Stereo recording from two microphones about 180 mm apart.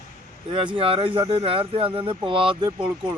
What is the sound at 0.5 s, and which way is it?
Speech, 30° right (ahead or behind).